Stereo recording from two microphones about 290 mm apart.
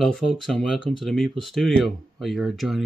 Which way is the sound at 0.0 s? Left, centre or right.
Centre.